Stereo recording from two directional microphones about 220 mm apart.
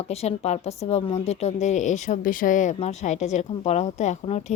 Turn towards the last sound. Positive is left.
turn(degrees=30)  # may be behind; listen again after turning